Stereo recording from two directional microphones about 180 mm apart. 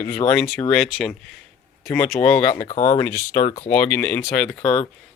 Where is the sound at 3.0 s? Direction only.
15° left (ahead or behind).